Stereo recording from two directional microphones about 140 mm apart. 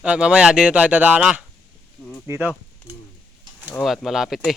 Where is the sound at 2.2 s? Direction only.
20° right (ahead or behind).